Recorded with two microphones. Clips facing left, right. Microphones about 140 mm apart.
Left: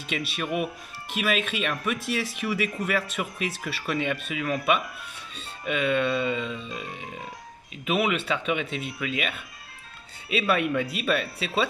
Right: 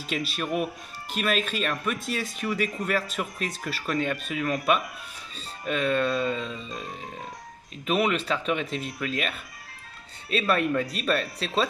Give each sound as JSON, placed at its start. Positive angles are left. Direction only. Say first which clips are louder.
{"t": 0.0, "sound": "speech", "louder": "right 1 dB", "side_deg": 0}
{"t": 5.7, "sound": "speech", "louder": "even", "side_deg": 5}